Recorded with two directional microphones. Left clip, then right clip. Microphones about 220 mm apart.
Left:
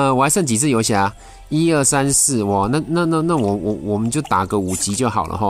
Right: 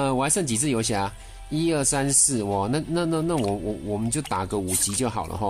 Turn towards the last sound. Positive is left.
turn(degrees=25)  # may be behind; listen again after turning